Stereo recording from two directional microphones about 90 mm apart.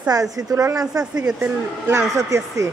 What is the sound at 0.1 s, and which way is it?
Speech, 40° right (ahead or behind).